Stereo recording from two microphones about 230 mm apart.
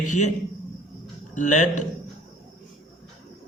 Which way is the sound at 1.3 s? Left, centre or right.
Left.